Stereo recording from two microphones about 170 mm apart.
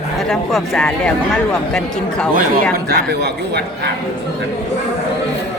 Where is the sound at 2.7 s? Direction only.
75° right (ahead or behind).